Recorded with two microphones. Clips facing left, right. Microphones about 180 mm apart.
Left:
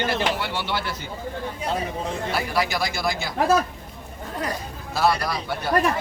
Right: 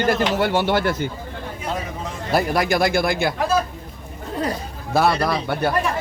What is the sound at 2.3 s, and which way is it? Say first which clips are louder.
Speech: right 8 dB; 50° right (ahead or behind).